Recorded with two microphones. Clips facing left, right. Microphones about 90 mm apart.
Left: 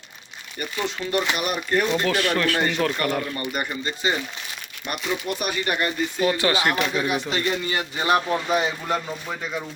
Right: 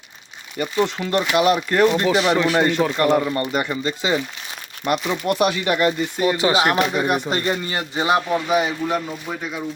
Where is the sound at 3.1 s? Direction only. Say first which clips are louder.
Right 8 dB; 25° right (ahead or behind).